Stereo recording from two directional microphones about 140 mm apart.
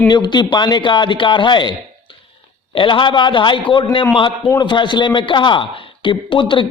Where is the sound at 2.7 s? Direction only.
35° left (ahead or behind).